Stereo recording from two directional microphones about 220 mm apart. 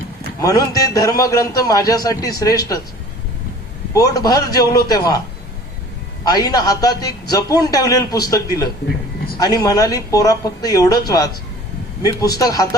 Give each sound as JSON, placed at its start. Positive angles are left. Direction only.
{"t": 0.4, "sound": "a man's voice", "side_deg": 15}
{"t": 3.9, "sound": "a man's voice", "side_deg": 15}
{"t": 6.2, "sound": "a man's voice", "side_deg": 15}